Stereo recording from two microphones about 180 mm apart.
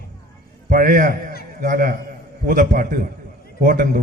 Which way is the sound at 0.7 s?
50° right (ahead or behind).